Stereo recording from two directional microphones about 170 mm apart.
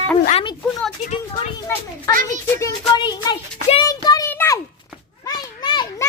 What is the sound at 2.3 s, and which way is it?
Speech, 20° left (ahead or behind).